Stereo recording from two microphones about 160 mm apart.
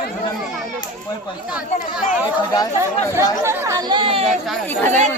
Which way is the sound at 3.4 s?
15° right (ahead or behind).